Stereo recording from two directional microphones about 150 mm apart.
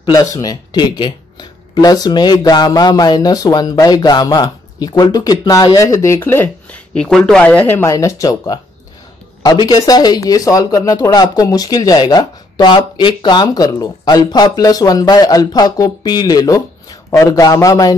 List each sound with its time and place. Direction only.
0.0 s speech: 25° left (ahead or behind)